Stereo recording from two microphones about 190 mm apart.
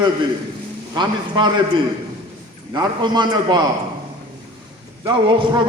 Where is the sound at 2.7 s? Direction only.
20° right (ahead or behind).